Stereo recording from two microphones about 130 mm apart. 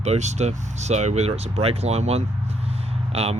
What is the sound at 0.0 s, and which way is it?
A man's voice, 60° right (ahead or behind).